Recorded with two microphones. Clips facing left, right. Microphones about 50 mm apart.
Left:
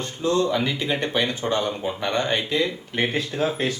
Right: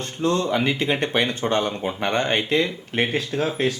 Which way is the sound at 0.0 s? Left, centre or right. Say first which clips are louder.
Even; right.